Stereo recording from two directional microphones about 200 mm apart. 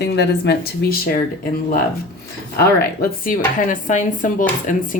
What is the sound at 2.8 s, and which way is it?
Speech, 45° left (ahead or behind).